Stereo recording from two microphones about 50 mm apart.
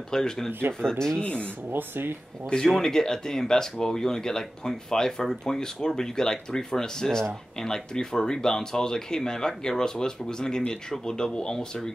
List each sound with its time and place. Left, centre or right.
0.1 s speech: centre
0.5 s speech: right
0.7 s speech: centre
1.2 s speech: left
1.7 s speech: right
2.5 s speech: centre